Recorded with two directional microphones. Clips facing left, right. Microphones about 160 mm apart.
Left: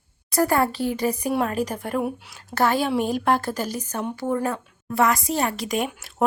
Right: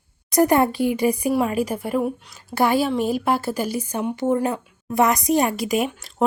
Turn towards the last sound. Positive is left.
turn(degrees=5)  # may be behind; listen again after turning